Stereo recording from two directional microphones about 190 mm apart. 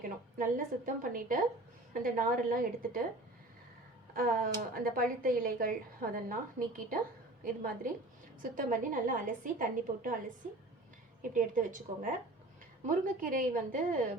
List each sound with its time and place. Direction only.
0.3 s speech: 45° right (ahead or behind)
4.1 s speech: 50° right (ahead or behind)
13.2 s speech: 45° right (ahead or behind)